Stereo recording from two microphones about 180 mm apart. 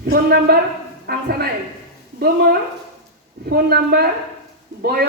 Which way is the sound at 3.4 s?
60° right (ahead or behind).